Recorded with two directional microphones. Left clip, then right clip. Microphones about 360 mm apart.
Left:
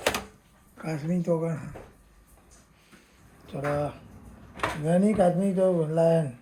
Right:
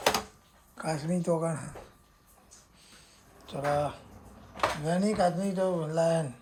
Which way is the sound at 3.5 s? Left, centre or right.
Centre.